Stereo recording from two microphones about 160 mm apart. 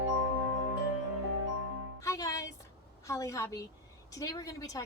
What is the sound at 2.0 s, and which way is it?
Music, 20° left (ahead or behind).